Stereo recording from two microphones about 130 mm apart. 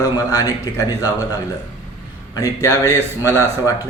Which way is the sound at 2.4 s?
25° left (ahead or behind).